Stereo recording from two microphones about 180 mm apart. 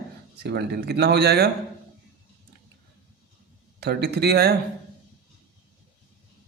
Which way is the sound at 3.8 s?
65° right (ahead or behind).